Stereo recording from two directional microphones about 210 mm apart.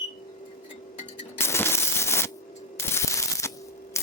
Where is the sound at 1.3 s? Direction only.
10° left (ahead or behind).